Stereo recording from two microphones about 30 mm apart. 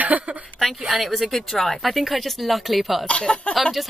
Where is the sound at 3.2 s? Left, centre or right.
Left.